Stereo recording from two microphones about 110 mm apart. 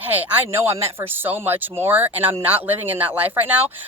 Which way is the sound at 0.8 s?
20° right (ahead or behind).